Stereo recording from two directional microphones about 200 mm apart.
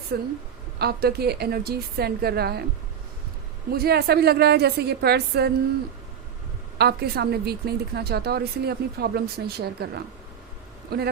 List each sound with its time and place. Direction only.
0.1 s speech: 50° right (ahead or behind)
3.7 s speech: 50° right (ahead or behind)
6.7 s speech: 55° right (ahead or behind)